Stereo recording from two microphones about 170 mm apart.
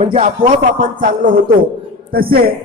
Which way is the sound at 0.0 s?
40° right (ahead or behind).